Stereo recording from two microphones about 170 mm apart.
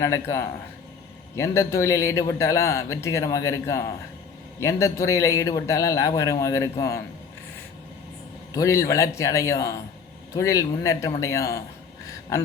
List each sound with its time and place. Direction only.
0.0 s a man's voice: 15° left (ahead or behind)
8.5 s a man's voice: 20° left (ahead or behind)